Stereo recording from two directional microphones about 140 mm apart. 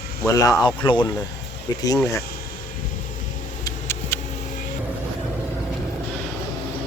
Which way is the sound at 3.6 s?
20° left (ahead or behind).